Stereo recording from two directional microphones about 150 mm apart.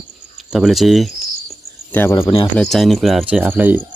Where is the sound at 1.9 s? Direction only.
15° left (ahead or behind).